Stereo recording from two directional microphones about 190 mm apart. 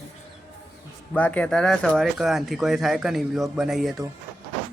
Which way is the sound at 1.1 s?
10° left (ahead or behind).